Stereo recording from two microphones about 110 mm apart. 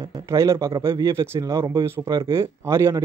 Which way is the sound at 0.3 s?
25° right (ahead or behind).